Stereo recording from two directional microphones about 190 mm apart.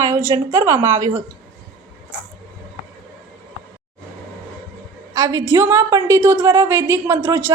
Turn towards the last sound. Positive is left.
turn(degrees=-15)  # may be behind; listen again after turning